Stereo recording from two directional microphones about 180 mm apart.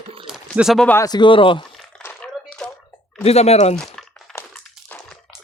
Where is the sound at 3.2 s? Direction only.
35° left (ahead or behind).